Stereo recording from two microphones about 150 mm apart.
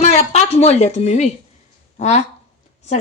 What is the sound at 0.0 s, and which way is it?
A woman's voice, 50° left (ahead or behind).